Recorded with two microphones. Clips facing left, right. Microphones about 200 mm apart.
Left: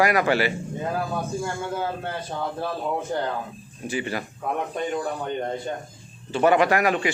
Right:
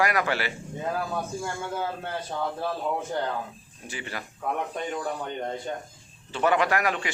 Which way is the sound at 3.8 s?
15° left (ahead or behind).